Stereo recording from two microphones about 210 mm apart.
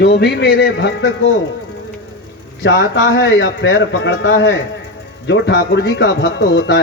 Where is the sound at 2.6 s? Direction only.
60° left (ahead or behind).